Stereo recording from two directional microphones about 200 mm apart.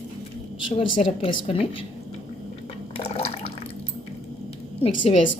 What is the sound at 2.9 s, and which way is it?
Water, 30° left (ahead or behind).